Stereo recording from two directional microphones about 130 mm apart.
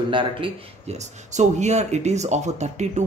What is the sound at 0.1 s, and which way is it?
Speech, 40° right (ahead or behind).